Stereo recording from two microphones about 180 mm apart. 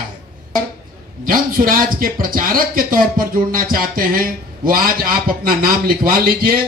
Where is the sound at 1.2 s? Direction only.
50° right (ahead or behind).